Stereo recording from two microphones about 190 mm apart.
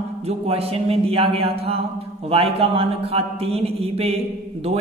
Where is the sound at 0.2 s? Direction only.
35° right (ahead or behind).